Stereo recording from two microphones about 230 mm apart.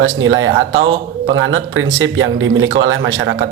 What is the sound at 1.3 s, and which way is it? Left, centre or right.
A man's voice, right.